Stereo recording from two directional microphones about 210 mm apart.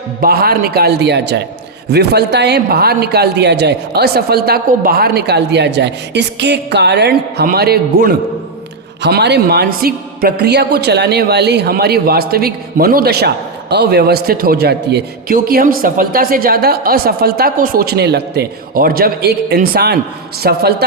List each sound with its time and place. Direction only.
0.2 s a man's voice: 45° right (ahead or behind)